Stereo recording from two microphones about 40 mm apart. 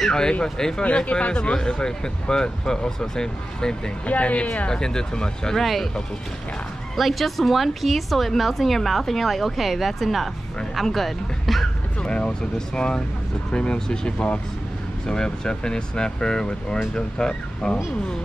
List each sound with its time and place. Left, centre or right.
0.0 s a sound: centre
0.3 s speech: centre
4.1 s speech: left
5.6 s a woman's voice: centre
7.0 s a woman's voice: centre
12.0 s speech: left